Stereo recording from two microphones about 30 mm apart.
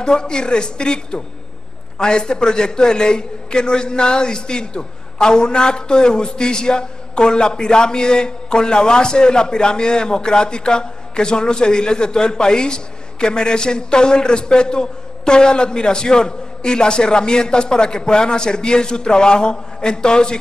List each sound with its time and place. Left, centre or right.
0.0 s a man's voice: left